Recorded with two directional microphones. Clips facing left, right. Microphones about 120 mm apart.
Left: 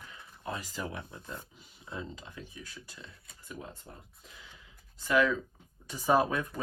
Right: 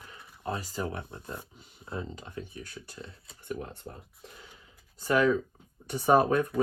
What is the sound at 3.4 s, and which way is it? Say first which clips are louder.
Speech: right 7 dB; 65° right (ahead or behind).